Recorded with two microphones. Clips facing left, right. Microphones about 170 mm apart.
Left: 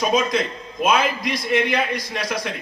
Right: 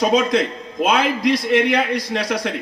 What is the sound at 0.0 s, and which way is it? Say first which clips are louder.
A man's voice: right 4 dB; 65° right (ahead or behind).